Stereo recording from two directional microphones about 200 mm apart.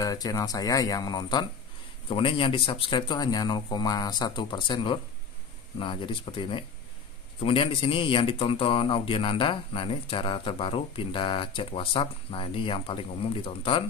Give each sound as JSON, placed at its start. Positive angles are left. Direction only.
{"t": 0.0, "sound": "speech", "side_deg": 15}